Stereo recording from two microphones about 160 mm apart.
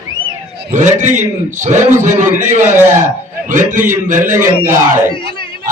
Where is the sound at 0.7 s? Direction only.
50° right (ahead or behind).